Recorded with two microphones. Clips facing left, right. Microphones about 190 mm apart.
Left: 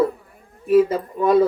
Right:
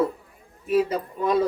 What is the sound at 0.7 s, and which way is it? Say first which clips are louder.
Speech: left 6 dB; 50° left (ahead or behind).